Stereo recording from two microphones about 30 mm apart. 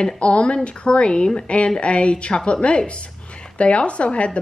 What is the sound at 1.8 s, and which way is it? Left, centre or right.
A woman's voice, left.